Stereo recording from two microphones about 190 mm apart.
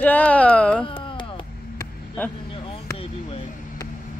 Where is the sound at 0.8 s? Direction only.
25° left (ahead or behind).